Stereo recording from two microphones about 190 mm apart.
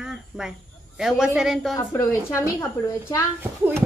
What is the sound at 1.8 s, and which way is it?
A woman's voice, 15° left (ahead or behind).